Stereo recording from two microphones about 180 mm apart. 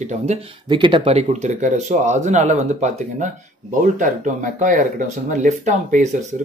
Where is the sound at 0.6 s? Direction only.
25° right (ahead or behind).